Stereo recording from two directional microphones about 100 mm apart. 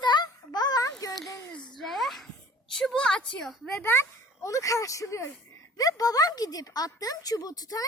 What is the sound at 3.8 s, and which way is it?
A woman's voice, 25° left (ahead or behind).